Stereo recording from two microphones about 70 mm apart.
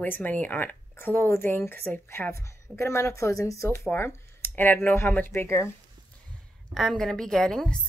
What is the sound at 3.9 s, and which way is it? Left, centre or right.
Speech, left.